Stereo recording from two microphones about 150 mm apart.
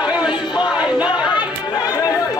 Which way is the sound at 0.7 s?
5° right (ahead or behind).